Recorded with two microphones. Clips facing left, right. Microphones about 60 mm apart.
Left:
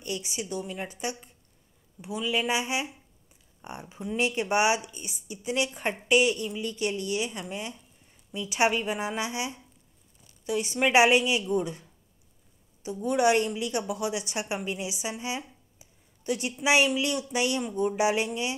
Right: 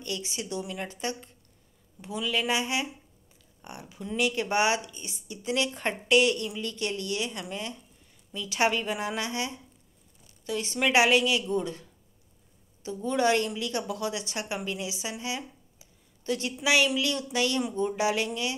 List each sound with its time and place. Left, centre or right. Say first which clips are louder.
0.0 s a woman's voice: left 1 dB; centre
12.8 s a woman's voice: left 2 dB; centre